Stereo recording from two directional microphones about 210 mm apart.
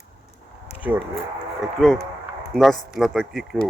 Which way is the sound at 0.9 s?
10° right (ahead or behind).